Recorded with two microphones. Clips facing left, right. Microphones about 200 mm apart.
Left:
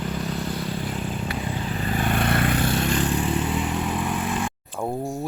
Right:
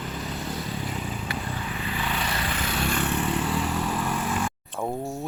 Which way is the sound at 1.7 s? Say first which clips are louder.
Left 9 dB; 40° left (ahead or behind).